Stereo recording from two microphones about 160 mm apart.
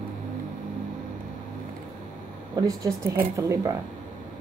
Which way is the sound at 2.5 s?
20° right (ahead or behind).